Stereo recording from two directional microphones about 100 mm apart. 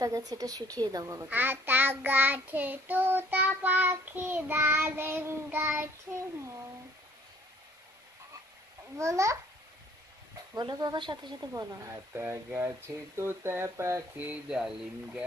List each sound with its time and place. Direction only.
0.0 s a woman's voice: 40° right (ahead or behind)
1.3 s child singing: 20° right (ahead or behind)
6.1 s speech: 10° right (ahead or behind)
8.9 s a woman's voice: 30° right (ahead or behind)
10.5 s speech: 45° right (ahead or behind)
11.5 s child singing: 30° right (ahead or behind)
14.1 s speech: 15° right (ahead or behind)